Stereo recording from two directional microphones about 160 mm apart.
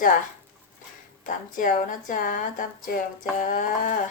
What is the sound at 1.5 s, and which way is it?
Speech, 55° left (ahead or behind).